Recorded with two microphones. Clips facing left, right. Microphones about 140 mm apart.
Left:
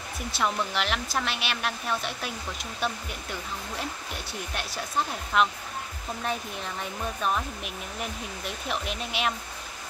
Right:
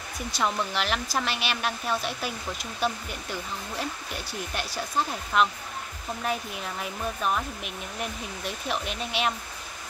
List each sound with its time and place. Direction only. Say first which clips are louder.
0.3 s speech: even; centre (ahead or behind)